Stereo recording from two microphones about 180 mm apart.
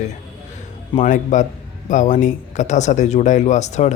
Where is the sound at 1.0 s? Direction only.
45° left (ahead or behind).